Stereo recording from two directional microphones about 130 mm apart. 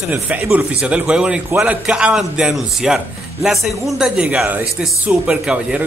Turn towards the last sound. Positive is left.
turn(degrees=-10)  # may be behind; listen again after turning